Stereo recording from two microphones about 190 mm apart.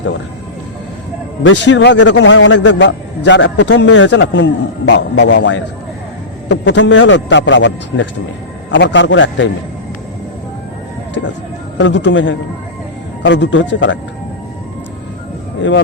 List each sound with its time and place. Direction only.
1.5 s a man's voice: 75° left (ahead or behind)
11.8 s a man's voice: 70° left (ahead or behind)